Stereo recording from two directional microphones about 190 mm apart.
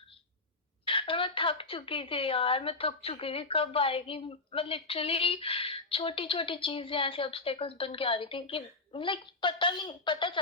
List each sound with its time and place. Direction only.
0.9 s a woman's voice: 25° left (ahead or behind)